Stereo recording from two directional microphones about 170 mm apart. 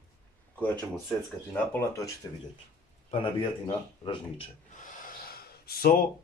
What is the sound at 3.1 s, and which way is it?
A man's voice, 30° left (ahead or behind).